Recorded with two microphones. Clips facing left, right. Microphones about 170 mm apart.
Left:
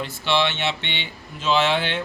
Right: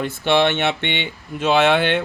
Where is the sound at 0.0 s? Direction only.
55° right (ahead or behind).